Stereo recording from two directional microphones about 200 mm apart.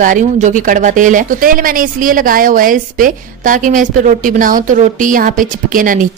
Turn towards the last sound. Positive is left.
turn(degrees=-45)  # may be behind; listen again after turning